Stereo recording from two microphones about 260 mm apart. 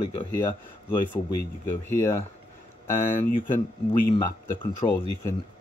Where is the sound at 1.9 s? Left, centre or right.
Centre.